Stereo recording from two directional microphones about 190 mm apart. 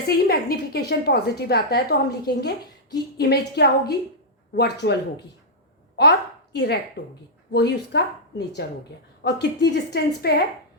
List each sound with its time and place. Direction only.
0.2 s a woman's voice: 55° left (ahead or behind)
6.0 s a woman's voice: 65° left (ahead or behind)